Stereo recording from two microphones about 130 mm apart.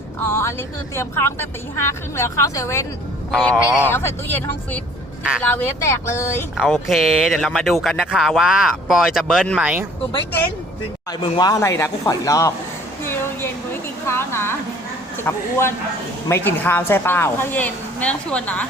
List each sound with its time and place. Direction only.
0.3 s a sound: 20° left (ahead or behind)
0.9 s speech: 20° left (ahead or behind)
3.3 s speech: 10° left (ahead or behind)
6.6 s speech: centre (ahead or behind)
11.1 s speech: 30° left (ahead or behind)
13.0 s a sound: 20° left (ahead or behind)
15.2 s speech: 20° left (ahead or behind)